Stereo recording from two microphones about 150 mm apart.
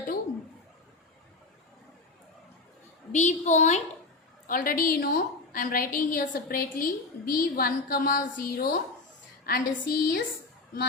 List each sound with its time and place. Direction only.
3.1 s a woman's voice: 50° left (ahead or behind)
4.4 s a woman's voice: 70° left (ahead or behind)